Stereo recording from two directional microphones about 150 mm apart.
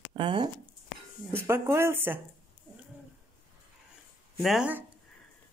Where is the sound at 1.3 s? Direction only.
15° right (ahead or behind).